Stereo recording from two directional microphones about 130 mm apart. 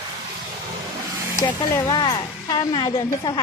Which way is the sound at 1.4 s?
25° left (ahead or behind).